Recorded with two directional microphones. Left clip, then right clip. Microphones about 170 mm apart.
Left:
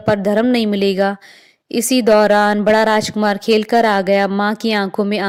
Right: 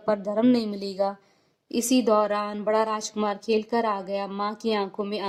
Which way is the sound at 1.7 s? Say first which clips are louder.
Left 9 dB; 30° left (ahead or behind).